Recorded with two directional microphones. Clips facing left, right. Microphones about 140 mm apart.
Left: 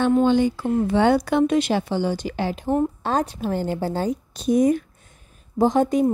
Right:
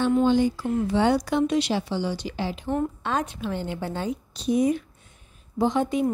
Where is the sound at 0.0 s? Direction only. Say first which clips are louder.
Left 3 dB; 60° left (ahead or behind).